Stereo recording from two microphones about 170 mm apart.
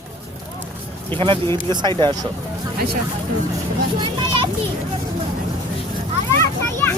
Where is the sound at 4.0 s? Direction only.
30° right (ahead or behind).